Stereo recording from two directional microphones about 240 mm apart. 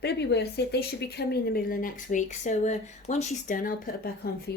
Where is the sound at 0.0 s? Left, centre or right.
Left.